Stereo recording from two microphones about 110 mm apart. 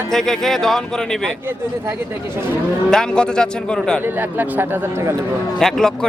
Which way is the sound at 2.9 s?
5° left (ahead or behind).